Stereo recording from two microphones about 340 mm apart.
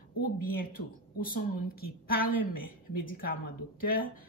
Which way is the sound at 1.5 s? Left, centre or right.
Left.